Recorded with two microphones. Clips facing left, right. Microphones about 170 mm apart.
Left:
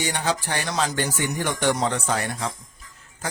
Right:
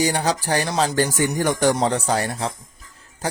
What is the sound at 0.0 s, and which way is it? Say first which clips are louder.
A man's voice: right 5 dB; 35° right (ahead or behind).